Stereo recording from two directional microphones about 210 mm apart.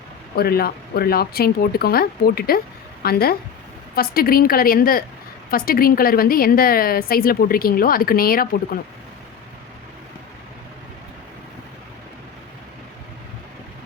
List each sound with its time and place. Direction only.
0.3 s a woman's voice: 45° left (ahead or behind)